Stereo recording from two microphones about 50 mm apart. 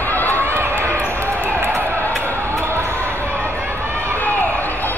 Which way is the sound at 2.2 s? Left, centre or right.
Right.